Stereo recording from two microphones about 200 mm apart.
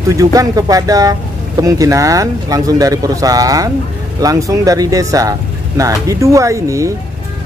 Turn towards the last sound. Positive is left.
turn(degrees=-15)  # may be behind; listen again after turning